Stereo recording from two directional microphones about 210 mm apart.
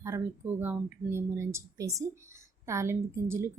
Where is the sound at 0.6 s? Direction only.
10° right (ahead or behind).